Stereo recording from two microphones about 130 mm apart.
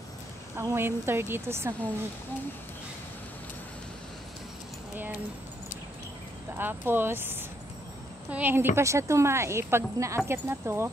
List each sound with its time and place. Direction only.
0.6 s a woman's voice: 20° right (ahead or behind)
6.6 s a woman's voice: 15° right (ahead or behind)